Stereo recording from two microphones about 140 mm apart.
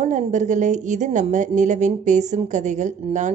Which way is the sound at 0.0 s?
55° right (ahead or behind).